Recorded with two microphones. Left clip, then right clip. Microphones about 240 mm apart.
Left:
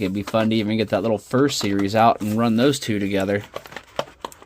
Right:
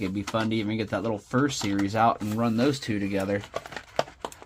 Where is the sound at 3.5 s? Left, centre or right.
Centre.